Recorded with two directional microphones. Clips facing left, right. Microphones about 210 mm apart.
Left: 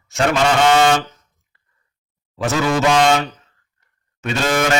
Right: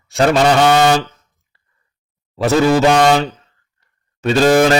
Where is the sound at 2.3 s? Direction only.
35° right (ahead or behind).